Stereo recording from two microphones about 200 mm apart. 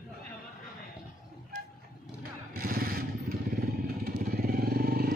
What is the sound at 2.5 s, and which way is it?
Vehicle, 45° right (ahead or behind).